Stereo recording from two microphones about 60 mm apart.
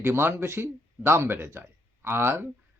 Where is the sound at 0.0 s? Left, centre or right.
Right.